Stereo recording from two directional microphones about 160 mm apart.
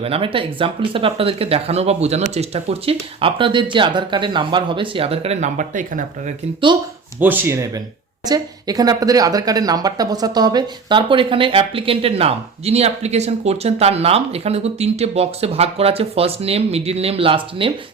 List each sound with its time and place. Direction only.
0.0 s speech: 35° right (ahead or behind); by 6.3 s 55° right (ahead or behind)
7.2 s speech: 10° right (ahead or behind); by 17.7 s 35° right (ahead or behind)